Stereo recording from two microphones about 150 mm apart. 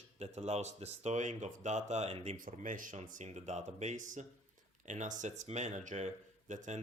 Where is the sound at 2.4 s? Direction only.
60° right (ahead or behind).